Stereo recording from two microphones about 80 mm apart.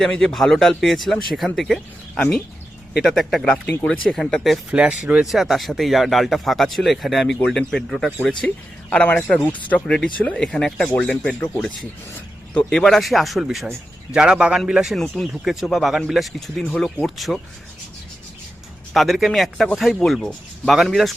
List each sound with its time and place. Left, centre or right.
0.0 s speech: centre
4.7 s speech: centre
5.2 s speech: centre
9.8 s speech: centre
12.5 s speech: centre
15.0 s speech: centre
15.3 s speech: centre
18.9 s speech: centre